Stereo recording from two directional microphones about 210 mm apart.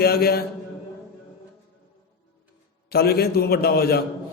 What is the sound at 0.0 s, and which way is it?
Speech, 50° left (ahead or behind).